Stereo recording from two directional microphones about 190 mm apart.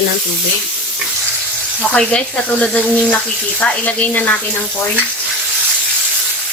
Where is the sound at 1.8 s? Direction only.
5° left (ahead or behind).